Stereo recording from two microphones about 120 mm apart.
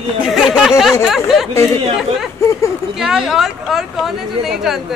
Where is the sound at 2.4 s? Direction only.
25° left (ahead or behind).